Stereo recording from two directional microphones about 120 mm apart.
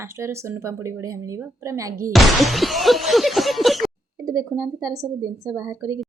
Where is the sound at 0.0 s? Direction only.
20° right (ahead or behind).